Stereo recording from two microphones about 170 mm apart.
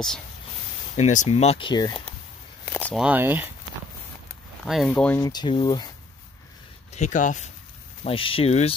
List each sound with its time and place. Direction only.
0.9 s speech: 45° left (ahead or behind); by 2.0 s 25° left (ahead or behind)
2.6 s a sound: 5° left (ahead or behind)
3.0 s speech: 10° right (ahead or behind)
4.6 s speech: centre (ahead or behind)
5.2 s speech: 25° left (ahead or behind)
6.9 s speech: 45° left (ahead or behind)
8.0 s speech: 30° left (ahead or behind)